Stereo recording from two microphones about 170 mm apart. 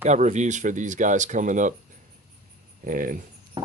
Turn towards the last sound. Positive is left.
turn(degrees=-25)  # may be behind; listen again after turning